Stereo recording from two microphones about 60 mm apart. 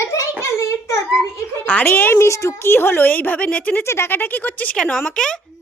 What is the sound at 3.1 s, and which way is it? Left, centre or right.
Speech, left.